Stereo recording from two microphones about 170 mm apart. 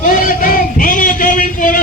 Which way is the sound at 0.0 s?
55° left (ahead or behind).